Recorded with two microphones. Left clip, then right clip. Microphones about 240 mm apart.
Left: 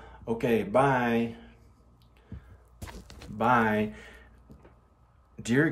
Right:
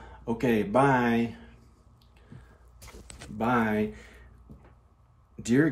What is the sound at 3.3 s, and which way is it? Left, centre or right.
Speech, centre.